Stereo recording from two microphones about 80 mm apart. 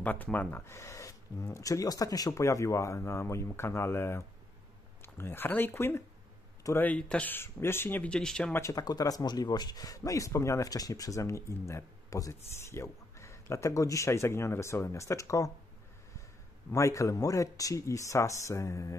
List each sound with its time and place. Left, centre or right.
0.0 s speech: left
0.7 s speech: left
6.8 s speech: centre
7.3 s speech: left
8.0 s speech: centre
8.7 s speech: left
16.7 s speech: left